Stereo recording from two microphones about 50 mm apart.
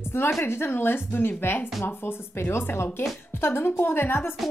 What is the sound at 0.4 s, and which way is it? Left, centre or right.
A woman's voice, left.